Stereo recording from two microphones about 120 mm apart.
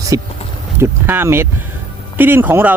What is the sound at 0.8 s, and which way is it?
Speech, 20° right (ahead or behind).